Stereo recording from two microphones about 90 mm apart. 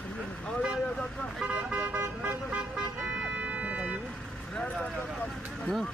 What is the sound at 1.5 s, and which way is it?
Vehicle, 15° right (ahead or behind).